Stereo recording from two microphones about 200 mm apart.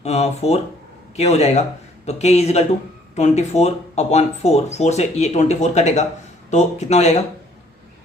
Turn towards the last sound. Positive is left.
turn(degrees=35)  # may be behind; listen again after turning